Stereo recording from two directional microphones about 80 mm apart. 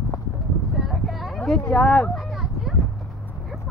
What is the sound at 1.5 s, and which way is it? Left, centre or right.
Speech, centre.